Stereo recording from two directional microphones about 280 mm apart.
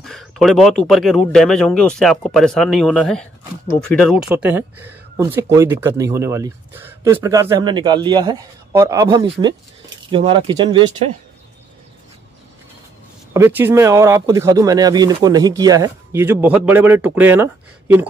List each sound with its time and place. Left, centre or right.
0.0 s speech: centre
13.3 s speech: centre